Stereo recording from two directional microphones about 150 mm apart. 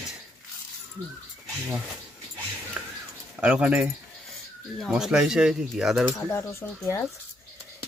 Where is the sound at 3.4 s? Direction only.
10° right (ahead or behind).